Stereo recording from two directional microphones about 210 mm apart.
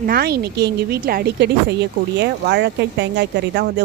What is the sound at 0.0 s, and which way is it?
Speech, 45° right (ahead or behind).